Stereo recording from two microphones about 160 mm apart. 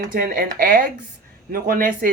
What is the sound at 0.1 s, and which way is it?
Speech, 60° right (ahead or behind).